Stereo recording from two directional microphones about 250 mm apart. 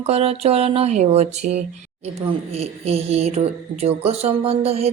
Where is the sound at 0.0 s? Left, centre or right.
Right.